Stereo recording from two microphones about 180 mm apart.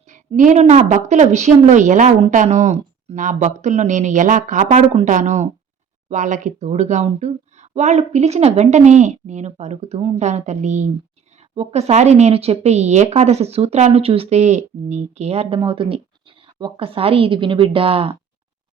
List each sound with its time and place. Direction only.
0.1 s a woman's voice: 45° right (ahead or behind)